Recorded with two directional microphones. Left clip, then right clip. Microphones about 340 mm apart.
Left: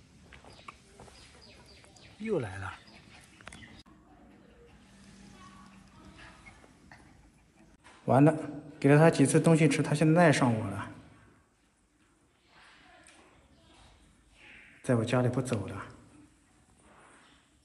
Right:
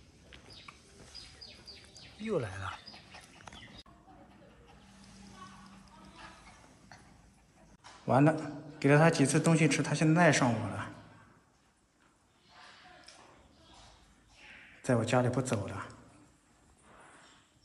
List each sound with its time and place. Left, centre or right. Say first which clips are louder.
1.0 s chicken: left 3 dB; centre
2.2 s a man's voice: left 2 dB; centre
8.0 s a man's voice: left 3 dB; centre
14.8 s a man's voice: even; centre